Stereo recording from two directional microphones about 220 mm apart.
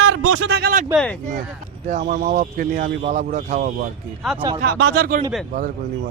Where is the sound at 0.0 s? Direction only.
70° right (ahead or behind).